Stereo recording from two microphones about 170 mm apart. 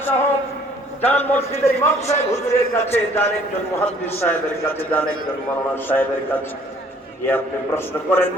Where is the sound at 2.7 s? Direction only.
15° left (ahead or behind).